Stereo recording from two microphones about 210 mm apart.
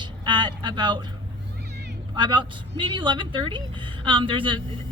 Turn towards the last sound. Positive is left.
turn(degrees=-25)  # may be behind; listen again after turning